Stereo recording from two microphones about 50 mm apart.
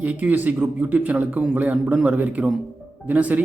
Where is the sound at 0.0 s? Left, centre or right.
Right.